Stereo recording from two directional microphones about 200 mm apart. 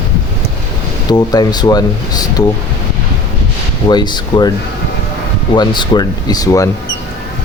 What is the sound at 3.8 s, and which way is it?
Speech, 20° left (ahead or behind).